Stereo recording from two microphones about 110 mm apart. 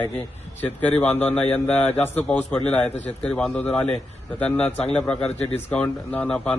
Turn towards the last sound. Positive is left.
turn(degrees=10)  # may be behind; listen again after turning